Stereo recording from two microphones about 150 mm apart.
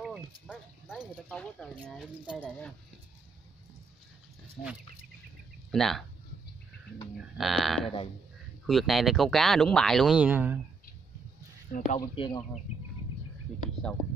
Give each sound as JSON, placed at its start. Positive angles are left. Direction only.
{"t": 0.9, "sound": "speech", "side_deg": 5}
{"t": 2.2, "sound": "speech", "side_deg": -5}
{"t": 5.7, "sound": "speech", "side_deg": 5}
{"t": 7.3, "sound": "speech", "side_deg": 0}
{"t": 11.7, "sound": "speech", "side_deg": 60}
{"t": 12.2, "sound": "speech", "side_deg": 35}